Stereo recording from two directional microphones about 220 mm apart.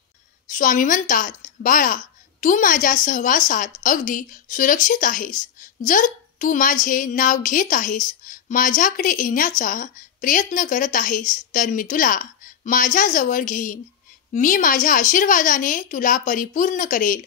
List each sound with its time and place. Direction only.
0.5 s a woman's voice: 35° left (ahead or behind)